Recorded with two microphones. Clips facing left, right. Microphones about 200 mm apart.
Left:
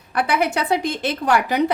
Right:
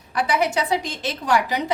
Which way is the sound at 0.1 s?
55° left (ahead or behind).